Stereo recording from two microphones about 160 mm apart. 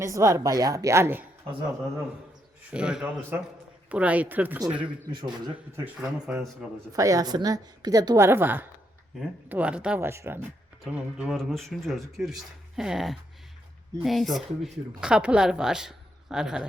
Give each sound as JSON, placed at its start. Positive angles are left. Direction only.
{"t": 0.0, "sound": "a woman's voice", "side_deg": -20}
{"t": 2.6, "sound": "speech", "side_deg": -5}
{"t": 5.0, "sound": "a woman's voice", "side_deg": -30}
{"t": 5.7, "sound": "speech", "side_deg": -15}
{"t": 6.2, "sound": "speech", "side_deg": -5}
{"t": 6.9, "sound": "a woman's voice", "side_deg": -20}
{"t": 11.2, "sound": "speech", "side_deg": 0}